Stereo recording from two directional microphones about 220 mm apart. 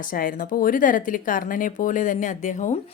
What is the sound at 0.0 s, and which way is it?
A woman's voice, 40° left (ahead or behind).